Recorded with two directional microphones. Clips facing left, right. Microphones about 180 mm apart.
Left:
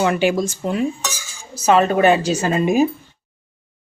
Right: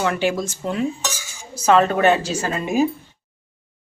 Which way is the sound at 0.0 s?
15° left (ahead or behind).